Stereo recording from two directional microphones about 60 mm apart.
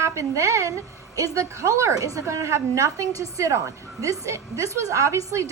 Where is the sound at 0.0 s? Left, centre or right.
Right.